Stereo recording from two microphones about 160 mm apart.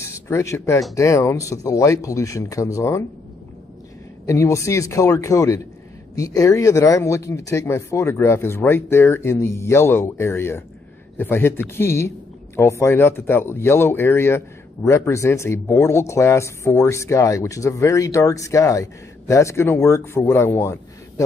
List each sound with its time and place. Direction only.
0.0 s speech: 15° left (ahead or behind)
4.3 s speech: 20° left (ahead or behind)